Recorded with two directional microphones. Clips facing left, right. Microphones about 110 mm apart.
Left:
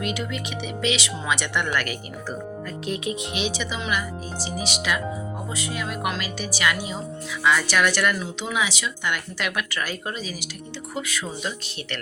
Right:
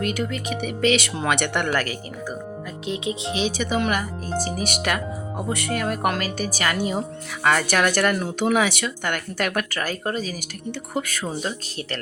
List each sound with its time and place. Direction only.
0.0 s speech: 45° right (ahead or behind)
2.8 s speech: 20° right (ahead or behind); by 11.9 s 40° right (ahead or behind)